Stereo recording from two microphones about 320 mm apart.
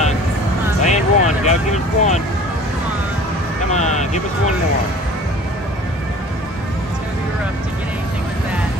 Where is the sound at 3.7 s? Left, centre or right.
Left.